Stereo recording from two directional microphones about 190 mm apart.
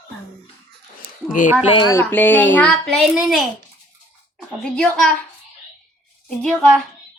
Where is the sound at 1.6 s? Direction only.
25° left (ahead or behind).